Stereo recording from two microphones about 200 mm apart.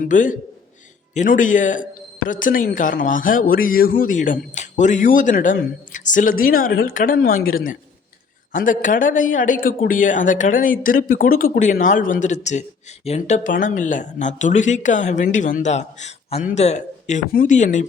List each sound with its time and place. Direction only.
0.0 s a man's voice: 40° left (ahead or behind)